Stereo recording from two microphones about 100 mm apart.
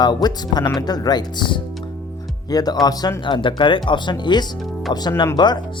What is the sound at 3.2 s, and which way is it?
Speech, 55° left (ahead or behind).